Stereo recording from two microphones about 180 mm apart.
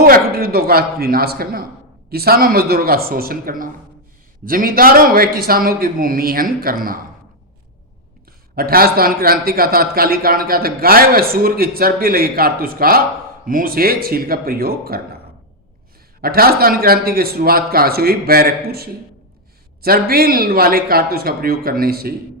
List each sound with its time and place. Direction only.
0.0 s a man's voice: 55° right (ahead or behind)
8.5 s a man's voice: 55° right (ahead or behind)
16.2 s a man's voice: 55° right (ahead or behind)